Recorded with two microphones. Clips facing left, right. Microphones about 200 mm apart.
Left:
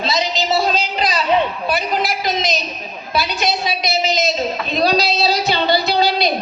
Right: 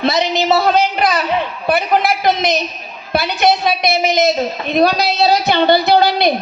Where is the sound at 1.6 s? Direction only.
60° right (ahead or behind).